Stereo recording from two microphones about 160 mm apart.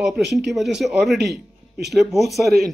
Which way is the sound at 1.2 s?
90° right.